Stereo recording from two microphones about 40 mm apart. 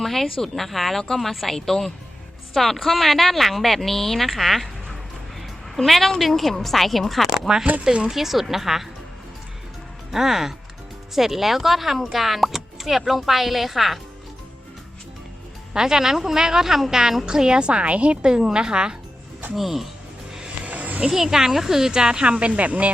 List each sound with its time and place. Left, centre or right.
0.0 s a woman's voice: centre
7.4 s speech: centre
8.1 s speech: centre
10.1 s a woman's voice: centre
15.7 s a woman's voice: centre
19.5 s a woman's voice: centre
20.7 s a sound: right
21.1 s speech: centre; by 22.9 s right